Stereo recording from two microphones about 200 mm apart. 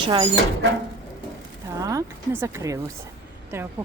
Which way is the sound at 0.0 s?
25° right (ahead or behind).